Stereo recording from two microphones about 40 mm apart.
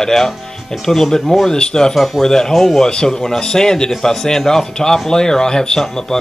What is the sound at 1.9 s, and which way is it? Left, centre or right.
Speech, centre.